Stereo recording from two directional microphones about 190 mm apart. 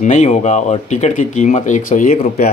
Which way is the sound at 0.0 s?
40° left (ahead or behind).